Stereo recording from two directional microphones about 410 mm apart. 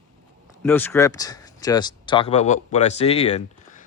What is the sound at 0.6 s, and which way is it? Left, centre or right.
Speech, centre.